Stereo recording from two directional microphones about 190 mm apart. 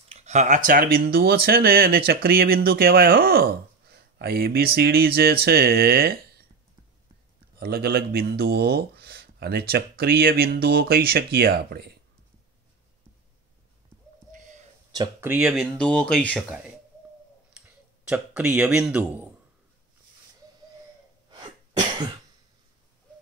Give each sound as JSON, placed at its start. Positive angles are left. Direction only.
{"t": 0.1, "sound": "speech", "side_deg": -35}
{"t": 7.5, "sound": "speech", "side_deg": -55}
{"t": 14.3, "sound": "a sound", "side_deg": -40}
{"t": 14.9, "sound": "a sound", "side_deg": -20}
{"t": 15.2, "sound": "speech", "side_deg": -10}
{"t": 15.5, "sound": "speech", "side_deg": 5}
{"t": 21.3, "sound": "sneeze", "side_deg": -20}